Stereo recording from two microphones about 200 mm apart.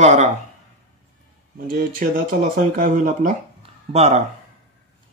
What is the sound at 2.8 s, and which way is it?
Speech, 40° right (ahead or behind).